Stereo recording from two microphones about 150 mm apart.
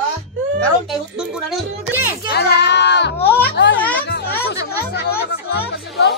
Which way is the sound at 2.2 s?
90° left.